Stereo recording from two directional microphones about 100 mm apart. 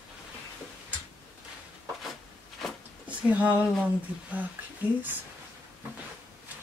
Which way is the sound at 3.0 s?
15° right (ahead or behind).